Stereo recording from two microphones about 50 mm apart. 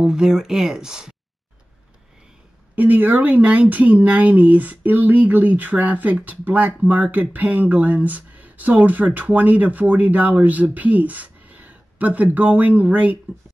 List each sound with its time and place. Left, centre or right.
0.0 s speech: centre
2.7 s speech: right